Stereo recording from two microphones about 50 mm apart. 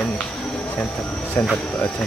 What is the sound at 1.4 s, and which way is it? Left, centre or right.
Speech, left.